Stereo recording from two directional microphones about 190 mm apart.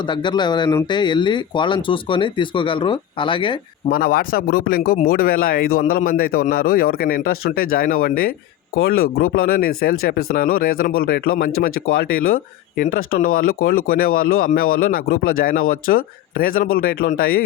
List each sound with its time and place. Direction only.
0.0 s speech: 25° left (ahead or behind)
3.8 s speech: 50° left (ahead or behind)